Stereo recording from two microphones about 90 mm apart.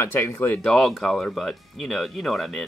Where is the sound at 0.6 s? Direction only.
5° left (ahead or behind).